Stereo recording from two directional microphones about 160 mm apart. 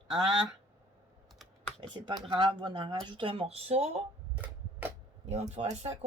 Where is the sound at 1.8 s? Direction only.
30° right (ahead or behind).